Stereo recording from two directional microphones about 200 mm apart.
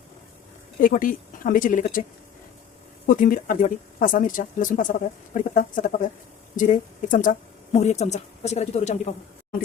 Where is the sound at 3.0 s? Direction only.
45° left (ahead or behind).